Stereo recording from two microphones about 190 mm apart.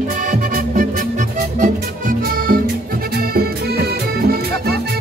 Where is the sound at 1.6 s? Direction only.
45° right (ahead or behind).